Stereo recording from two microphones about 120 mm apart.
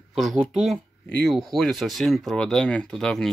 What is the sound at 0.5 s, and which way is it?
Speech, centre (ahead or behind).